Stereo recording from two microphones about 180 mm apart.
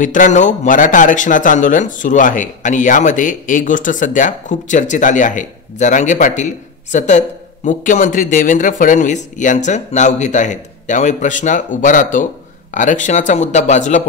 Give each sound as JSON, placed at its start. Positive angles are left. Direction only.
{"t": 0.0, "sound": "speech", "side_deg": 45}